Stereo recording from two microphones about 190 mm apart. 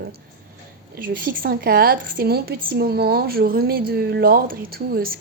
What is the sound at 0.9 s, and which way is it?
Speech, 50° right (ahead or behind).